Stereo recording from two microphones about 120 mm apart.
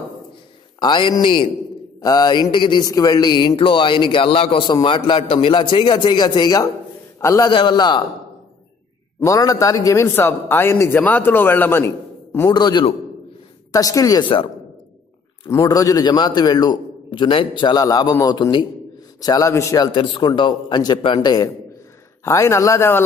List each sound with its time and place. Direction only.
0.7 s a man's voice: 40° left (ahead or behind)
7.5 s a man's voice: 40° left (ahead or behind)
9.2 s a man's voice: 30° left (ahead or behind)
12.4 s a man's voice: 35° left (ahead or behind)
15.6 s a man's voice: 30° left (ahead or behind)
19.2 s a man's voice: 30° left (ahead or behind)
22.2 s a man's voice: 25° left (ahead or behind)